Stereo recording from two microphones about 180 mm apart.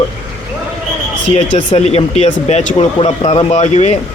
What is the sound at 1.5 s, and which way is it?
A man's voice, 35° left (ahead or behind).